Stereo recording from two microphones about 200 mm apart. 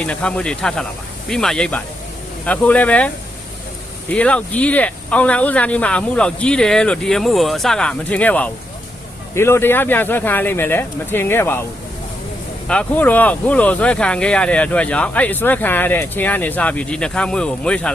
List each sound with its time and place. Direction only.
0.0 s speech: 5° left (ahead or behind)
4.1 s speech: 5° left (ahead or behind)
12.6 s speech: 5° left (ahead or behind)